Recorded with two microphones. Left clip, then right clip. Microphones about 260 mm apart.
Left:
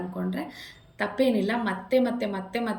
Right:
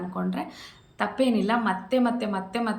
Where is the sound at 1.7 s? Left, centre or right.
Right.